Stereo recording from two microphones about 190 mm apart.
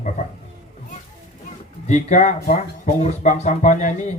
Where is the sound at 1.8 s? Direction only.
40° left (ahead or behind).